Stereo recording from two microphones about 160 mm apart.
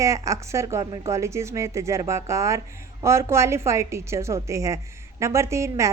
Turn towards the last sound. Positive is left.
turn(degrees=-20)  # may be behind; listen again after turning